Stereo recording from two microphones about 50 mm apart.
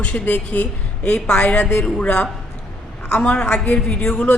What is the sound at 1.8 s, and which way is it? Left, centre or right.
Speech, centre.